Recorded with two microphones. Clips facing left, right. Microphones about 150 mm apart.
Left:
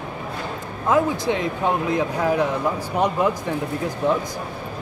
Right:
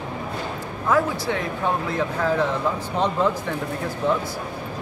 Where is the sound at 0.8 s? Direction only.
20° left (ahead or behind).